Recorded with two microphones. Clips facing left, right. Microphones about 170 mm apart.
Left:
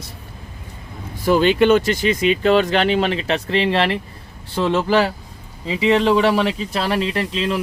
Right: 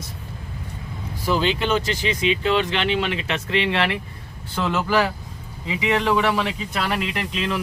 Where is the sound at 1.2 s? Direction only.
55° left (ahead or behind).